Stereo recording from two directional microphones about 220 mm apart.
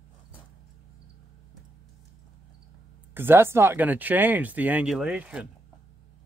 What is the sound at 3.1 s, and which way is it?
Speech, 10° right (ahead or behind).